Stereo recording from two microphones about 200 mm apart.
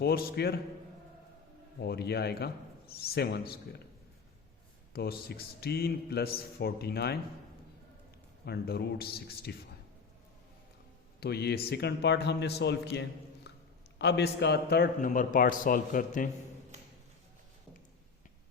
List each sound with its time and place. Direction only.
0.0 s a man's voice: 50° left (ahead or behind)
1.8 s a man's voice: 55° left (ahead or behind)
4.9 s a man's voice: 50° left (ahead or behind)
8.4 s a man's voice: 50° left (ahead or behind)
11.2 s a man's voice: 55° left (ahead or behind)